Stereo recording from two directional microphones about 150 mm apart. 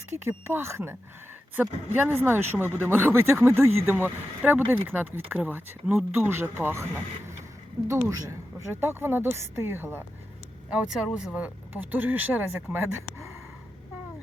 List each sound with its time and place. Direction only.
0.3 s speech: 15° right (ahead or behind)
2.0 s speech: 15° right (ahead or behind)
10.7 s speech: 5° right (ahead or behind)